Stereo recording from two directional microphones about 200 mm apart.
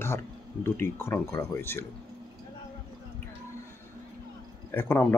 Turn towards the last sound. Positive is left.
turn(degrees=10)  # may be behind; listen again after turning